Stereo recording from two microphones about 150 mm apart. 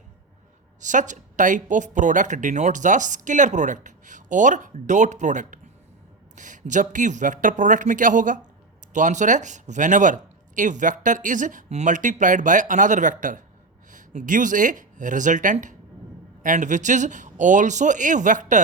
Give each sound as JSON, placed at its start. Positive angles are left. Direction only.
{"t": 0.8, "sound": "a woman's voice", "side_deg": -55}